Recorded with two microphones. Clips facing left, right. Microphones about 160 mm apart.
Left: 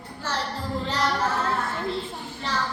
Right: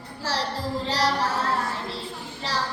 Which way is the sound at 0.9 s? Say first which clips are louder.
Right 2 dB; 35° right (ahead or behind).